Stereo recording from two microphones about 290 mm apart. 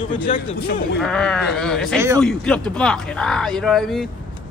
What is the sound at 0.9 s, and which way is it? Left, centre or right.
Speech, centre.